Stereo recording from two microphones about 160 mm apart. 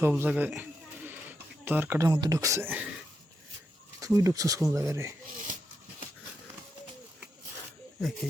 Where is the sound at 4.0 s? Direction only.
20° right (ahead or behind).